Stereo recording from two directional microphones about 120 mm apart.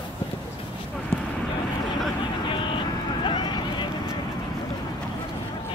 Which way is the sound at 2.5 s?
45° left (ahead or behind).